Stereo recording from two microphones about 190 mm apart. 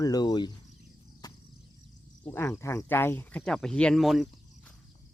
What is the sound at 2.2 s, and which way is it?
Speech, 15° left (ahead or behind).